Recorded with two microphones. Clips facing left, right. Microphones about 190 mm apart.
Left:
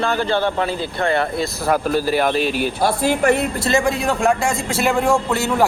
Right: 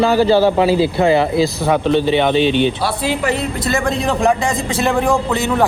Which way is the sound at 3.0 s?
50° left (ahead or behind).